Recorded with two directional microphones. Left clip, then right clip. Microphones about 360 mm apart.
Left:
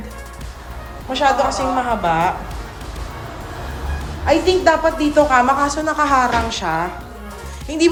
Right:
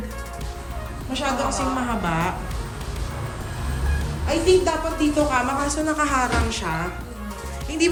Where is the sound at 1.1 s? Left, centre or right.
Centre.